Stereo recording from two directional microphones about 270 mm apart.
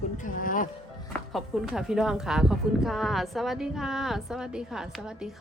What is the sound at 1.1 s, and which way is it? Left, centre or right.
Speech, centre.